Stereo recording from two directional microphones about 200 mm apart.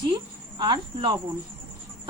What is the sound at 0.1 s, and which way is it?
Cricket, 20° right (ahead or behind).